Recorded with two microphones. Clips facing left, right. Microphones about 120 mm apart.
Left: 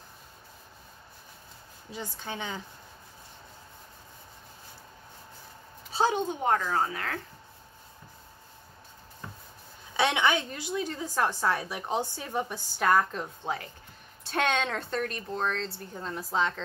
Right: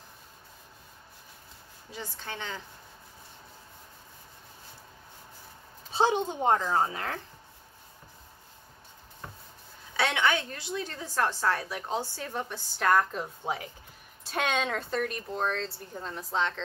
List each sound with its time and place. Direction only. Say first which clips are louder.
1.9 s a woman's voice: left 2 dB; 15° left (ahead or behind)
5.9 s a woman's voice: right 1 dB; 20° right (ahead or behind)
9.9 s a woman's voice: left 2 dB; 20° left (ahead or behind)